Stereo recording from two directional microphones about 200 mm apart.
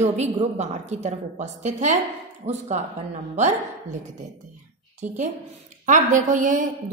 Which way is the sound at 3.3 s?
35° right (ahead or behind).